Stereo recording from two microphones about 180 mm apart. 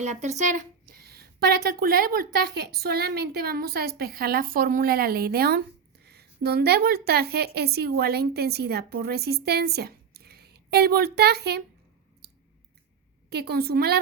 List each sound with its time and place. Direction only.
0.0 s a woman's voice: 40° right (ahead or behind); by 11.6 s 65° right (ahead or behind)
13.3 s a woman's voice: 60° right (ahead or behind)